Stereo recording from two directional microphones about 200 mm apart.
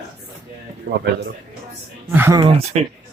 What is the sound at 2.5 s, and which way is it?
Speech, 30° right (ahead or behind).